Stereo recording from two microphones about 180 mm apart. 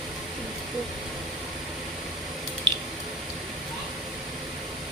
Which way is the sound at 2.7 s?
25° right (ahead or behind).